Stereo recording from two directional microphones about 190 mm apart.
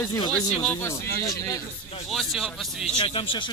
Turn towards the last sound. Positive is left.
turn(degrees=25)  # may be behind; listen again after turning